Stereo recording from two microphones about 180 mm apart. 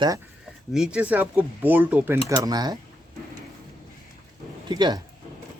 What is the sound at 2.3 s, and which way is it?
Speech, 20° right (ahead or behind).